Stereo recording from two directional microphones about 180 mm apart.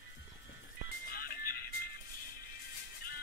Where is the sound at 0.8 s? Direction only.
55° left (ahead or behind).